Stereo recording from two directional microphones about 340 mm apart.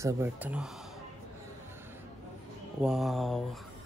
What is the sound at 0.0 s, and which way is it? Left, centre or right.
Speech, centre.